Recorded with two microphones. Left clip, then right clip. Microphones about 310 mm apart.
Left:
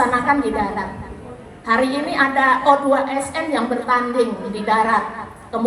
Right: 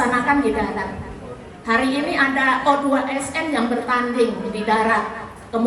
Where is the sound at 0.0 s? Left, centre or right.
Centre.